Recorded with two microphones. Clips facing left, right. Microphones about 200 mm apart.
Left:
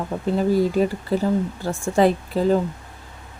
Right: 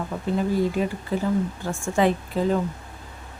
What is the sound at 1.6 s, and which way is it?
Speech, 35° left (ahead or behind).